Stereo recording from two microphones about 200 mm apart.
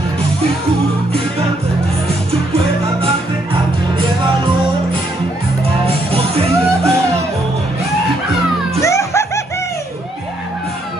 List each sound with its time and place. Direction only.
5.9 s music: 30° right (ahead or behind)
8.8 s music: 15° left (ahead or behind)